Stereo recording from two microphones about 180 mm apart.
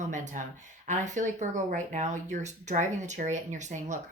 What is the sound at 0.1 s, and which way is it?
Speech, 45° right (ahead or behind).